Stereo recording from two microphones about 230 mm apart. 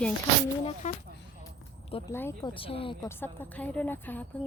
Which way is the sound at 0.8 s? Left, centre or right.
Left.